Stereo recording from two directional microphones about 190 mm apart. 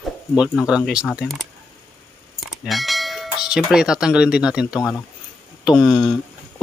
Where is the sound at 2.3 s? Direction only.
Centre (ahead or behind).